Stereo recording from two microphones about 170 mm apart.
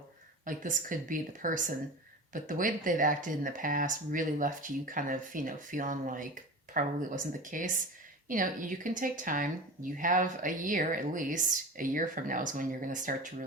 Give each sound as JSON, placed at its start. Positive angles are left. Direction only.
{"t": 0.4, "sound": "speech", "side_deg": -50}